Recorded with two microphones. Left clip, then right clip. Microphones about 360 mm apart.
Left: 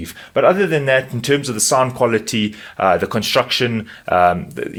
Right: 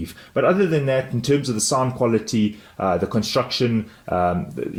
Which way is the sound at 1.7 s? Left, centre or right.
Left.